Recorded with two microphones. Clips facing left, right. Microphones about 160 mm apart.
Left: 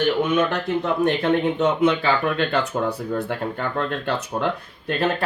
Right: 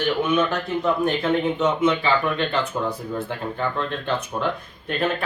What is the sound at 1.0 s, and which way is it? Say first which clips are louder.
Speech: left 2 dB; 65° left (ahead or behind).